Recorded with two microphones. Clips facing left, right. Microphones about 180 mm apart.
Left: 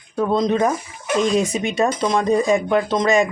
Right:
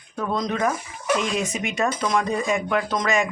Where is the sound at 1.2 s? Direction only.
35° left (ahead or behind).